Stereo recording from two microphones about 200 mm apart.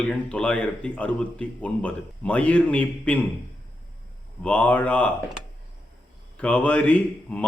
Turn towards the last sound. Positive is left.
turn(degrees=5)  # may be behind; listen again after turning